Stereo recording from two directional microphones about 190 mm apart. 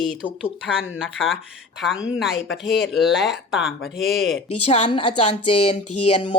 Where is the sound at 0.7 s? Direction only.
5° right (ahead or behind).